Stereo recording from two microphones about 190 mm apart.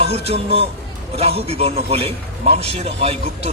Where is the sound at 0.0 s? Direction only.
35° right (ahead or behind).